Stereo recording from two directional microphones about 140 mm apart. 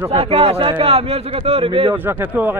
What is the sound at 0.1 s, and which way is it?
A man's voice, 45° right (ahead or behind).